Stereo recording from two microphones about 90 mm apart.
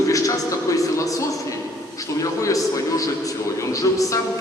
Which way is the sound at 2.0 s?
40° left (ahead or behind).